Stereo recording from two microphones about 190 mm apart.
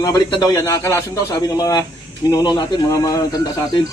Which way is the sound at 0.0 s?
20° left (ahead or behind).